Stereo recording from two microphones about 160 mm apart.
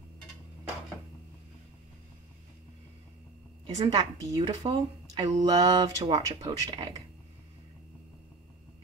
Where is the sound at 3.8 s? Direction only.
30° right (ahead or behind).